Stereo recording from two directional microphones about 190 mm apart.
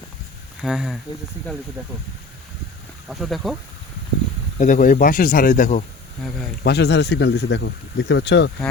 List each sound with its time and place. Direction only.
0.6 s speech: centre (ahead or behind)
3.1 s speech: centre (ahead or behind)
4.6 s speech: 45° left (ahead or behind)
6.6 s speech: 60° left (ahead or behind)